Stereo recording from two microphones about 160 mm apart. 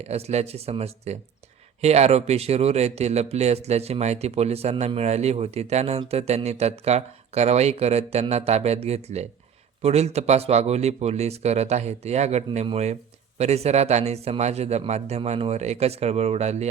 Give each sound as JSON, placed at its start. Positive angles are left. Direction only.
{"t": 0.0, "sound": "a man's voice", "side_deg": -40}